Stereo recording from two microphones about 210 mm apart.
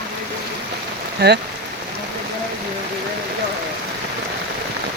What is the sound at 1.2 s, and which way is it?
Speech, 50° right (ahead or behind).